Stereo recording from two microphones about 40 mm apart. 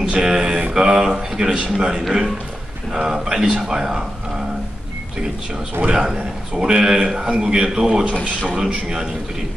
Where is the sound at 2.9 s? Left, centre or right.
Centre.